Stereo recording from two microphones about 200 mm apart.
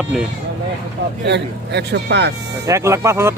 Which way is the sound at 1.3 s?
55° right (ahead or behind).